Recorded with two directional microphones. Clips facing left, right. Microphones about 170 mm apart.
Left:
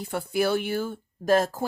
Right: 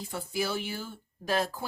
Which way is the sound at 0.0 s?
60° left (ahead or behind).